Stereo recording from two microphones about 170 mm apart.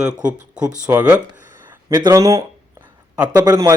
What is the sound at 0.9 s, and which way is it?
Speech, 10° right (ahead or behind).